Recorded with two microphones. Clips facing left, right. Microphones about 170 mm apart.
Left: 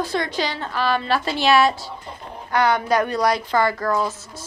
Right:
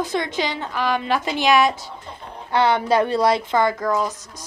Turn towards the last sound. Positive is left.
turn(degrees=-15)  # may be behind; listen again after turning